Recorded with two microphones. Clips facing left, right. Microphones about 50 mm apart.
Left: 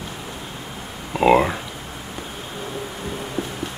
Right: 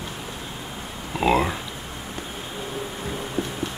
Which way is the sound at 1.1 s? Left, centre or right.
Centre.